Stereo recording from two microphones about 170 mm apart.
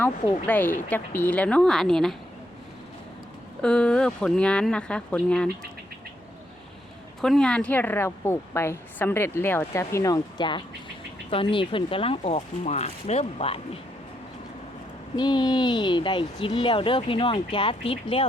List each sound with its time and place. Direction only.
0.0 s a woman's voice: 10° left (ahead or behind)
3.6 s speech: 5° left (ahead or behind)
7.2 s a woman's voice: centre (ahead or behind); by 13.6 s 35° left (ahead or behind)
15.1 s speech: 25° left (ahead or behind)